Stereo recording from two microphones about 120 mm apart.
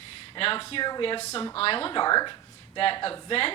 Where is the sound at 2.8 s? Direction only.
50° left (ahead or behind).